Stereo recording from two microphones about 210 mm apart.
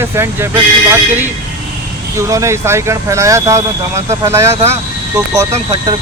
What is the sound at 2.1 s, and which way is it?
Speech, 15° right (ahead or behind).